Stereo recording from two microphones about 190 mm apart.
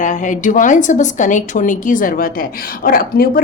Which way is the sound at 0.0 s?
40° left (ahead or behind).